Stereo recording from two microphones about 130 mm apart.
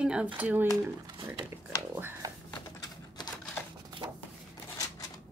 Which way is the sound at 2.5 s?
30° left (ahead or behind).